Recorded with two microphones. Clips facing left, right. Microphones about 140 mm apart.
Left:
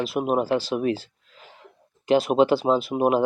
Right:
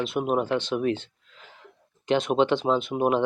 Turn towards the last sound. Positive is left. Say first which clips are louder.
# left 2 dB
turn(degrees=5)  # may be behind; listen again after turning